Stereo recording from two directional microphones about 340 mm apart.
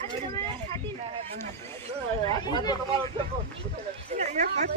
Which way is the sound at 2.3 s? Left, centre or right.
Centre.